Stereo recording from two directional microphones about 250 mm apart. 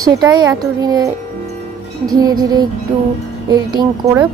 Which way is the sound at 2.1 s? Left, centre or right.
Centre.